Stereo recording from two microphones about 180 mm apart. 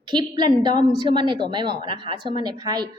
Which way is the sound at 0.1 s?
25° right (ahead or behind).